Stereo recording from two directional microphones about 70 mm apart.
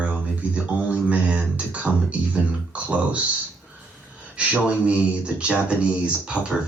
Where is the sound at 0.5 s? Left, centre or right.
Centre.